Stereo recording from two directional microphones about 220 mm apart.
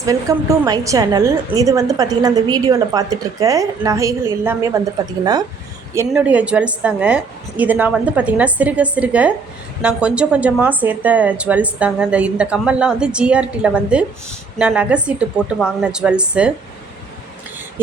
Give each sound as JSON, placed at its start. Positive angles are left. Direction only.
{"t": 0.0, "sound": "a woman's voice", "side_deg": -15}
{"t": 6.1, "sound": "a woman's voice", "side_deg": -5}